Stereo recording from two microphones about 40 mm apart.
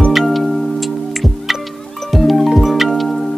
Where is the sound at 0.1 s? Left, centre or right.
Centre.